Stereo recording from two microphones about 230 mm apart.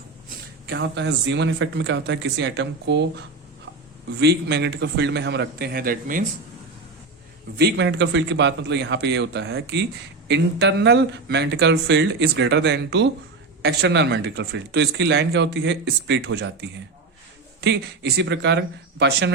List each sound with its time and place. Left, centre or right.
0.7 s speech: right
7.6 s speech: right